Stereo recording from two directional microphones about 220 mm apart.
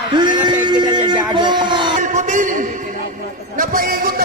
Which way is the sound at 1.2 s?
20° right (ahead or behind).